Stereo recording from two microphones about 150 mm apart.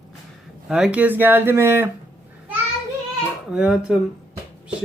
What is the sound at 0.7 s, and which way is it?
Speech, 5° right (ahead or behind).